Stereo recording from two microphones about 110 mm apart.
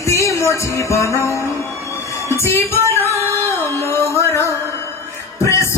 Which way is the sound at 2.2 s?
25° left (ahead or behind).